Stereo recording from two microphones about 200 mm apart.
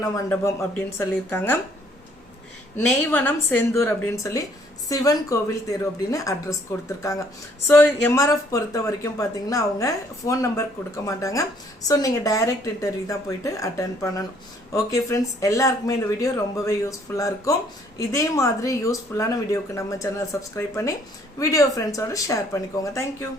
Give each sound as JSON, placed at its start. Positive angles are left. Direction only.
{"t": 0.0, "sound": "speech", "side_deg": 15}
{"t": 2.7, "sound": "speech", "side_deg": 10}